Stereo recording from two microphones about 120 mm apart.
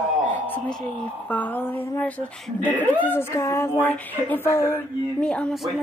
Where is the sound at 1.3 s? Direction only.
15° left (ahead or behind).